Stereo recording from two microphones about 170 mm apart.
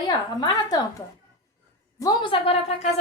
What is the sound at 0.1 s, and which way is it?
A woman's voice, 25° left (ahead or behind).